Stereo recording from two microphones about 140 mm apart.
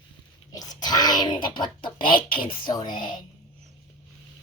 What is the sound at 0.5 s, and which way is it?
Speech, 25° left (ahead or behind).